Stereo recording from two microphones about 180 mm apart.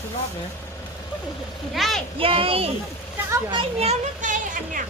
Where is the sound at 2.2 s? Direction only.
30° right (ahead or behind).